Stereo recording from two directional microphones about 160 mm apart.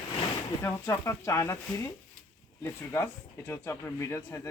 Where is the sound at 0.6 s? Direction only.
15° left (ahead or behind).